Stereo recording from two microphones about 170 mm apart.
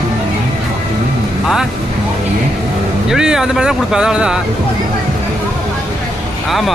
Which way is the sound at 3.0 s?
5° right (ahead or behind).